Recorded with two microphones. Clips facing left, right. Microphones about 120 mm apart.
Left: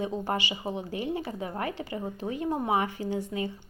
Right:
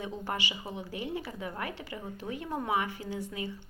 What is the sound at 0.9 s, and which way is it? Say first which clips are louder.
Speech: left 5 dB; 35° left (ahead or behind).